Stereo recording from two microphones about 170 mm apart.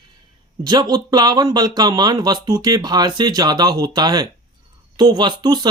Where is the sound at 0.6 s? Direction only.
25° right (ahead or behind).